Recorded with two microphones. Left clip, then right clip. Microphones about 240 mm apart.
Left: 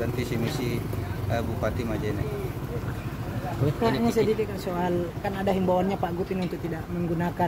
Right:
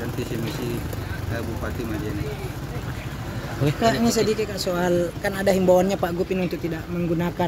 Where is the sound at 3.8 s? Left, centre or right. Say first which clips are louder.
Right 3 dB; right.